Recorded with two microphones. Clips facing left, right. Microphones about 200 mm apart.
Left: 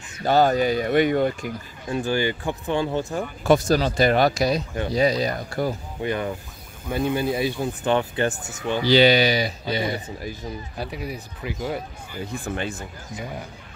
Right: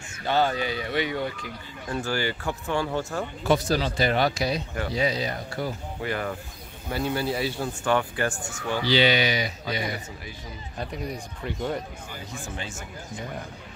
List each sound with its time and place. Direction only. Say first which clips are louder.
0.2 s speech: left 6 dB; 40° left (ahead or behind)
1.9 s speech: left 5 dB; 20° left (ahead or behind)
3.4 s speech: left 5 dB; 45° left (ahead or behind)
6.0 s speech: left 4 dB; 20° left (ahead or behind)
8.8 s speech: left 6 dB; 40° left (ahead or behind)
10.8 s speech: right 1 dB; 5° left (ahead or behind)
12.3 s speech: left 9 dB; 60° left (ahead or behind)